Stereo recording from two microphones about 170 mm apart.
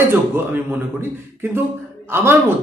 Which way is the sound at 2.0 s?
15° right (ahead or behind).